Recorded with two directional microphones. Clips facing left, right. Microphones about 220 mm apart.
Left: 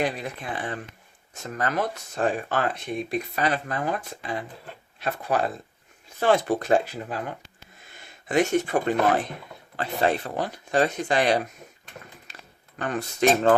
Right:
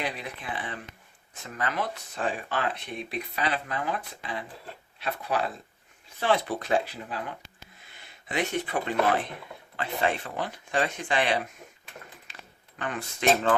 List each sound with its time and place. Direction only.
0.0 s speech: 45° left (ahead or behind)
12.3 s a sound: 40° left (ahead or behind)
12.8 s speech: 40° left (ahead or behind)